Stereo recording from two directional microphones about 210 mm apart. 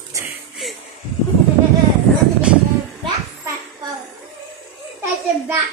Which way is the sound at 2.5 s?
5° right (ahead or behind).